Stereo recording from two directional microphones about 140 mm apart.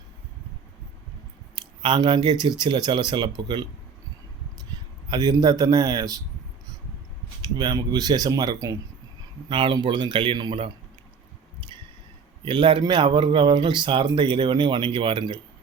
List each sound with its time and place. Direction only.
1.8 s speech: 35° right (ahead or behind)
5.0 s speech: 30° right (ahead or behind)
7.4 s speech: 30° right (ahead or behind)
9.5 s speech: 40° right (ahead or behind)
12.5 s speech: 35° right (ahead or behind)